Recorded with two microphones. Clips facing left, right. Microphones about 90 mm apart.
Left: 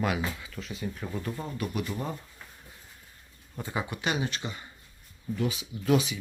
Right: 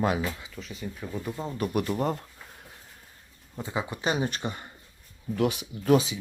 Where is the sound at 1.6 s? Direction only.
50° right (ahead or behind); by 2.2 s 65° right (ahead or behind).